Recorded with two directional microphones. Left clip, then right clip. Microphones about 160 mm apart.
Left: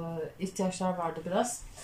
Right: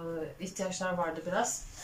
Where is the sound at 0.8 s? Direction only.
15° left (ahead or behind).